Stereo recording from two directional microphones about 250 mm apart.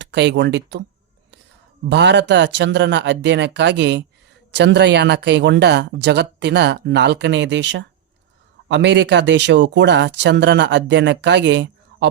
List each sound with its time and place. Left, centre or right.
0.0 s speech: right
1.9 s speech: right